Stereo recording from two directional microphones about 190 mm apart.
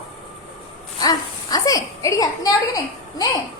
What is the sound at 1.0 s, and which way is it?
A woman's voice, 20° left (ahead or behind).